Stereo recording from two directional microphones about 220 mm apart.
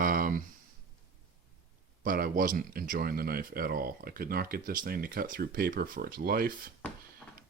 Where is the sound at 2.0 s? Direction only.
40° right (ahead or behind).